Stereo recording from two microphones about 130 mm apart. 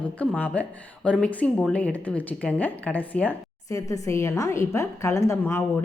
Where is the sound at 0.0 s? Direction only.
10° left (ahead or behind).